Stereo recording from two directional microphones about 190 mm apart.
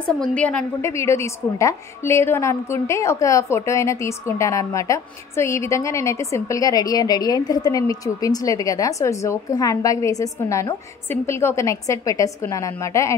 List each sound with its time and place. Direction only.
0.2 s a woman's voice: 5° left (ahead or behind)